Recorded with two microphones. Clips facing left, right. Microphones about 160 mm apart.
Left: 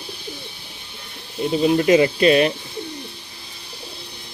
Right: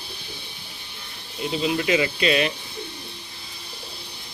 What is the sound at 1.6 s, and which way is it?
Speech, 40° left (ahead or behind).